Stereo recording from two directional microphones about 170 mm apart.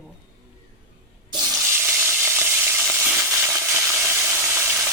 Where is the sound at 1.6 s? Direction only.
15° right (ahead or behind).